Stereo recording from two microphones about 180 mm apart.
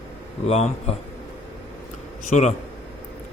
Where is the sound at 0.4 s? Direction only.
35° left (ahead or behind).